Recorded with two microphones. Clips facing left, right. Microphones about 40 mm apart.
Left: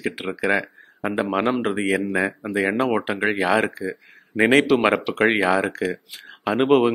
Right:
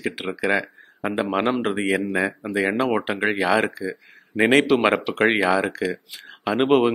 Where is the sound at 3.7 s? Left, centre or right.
Left.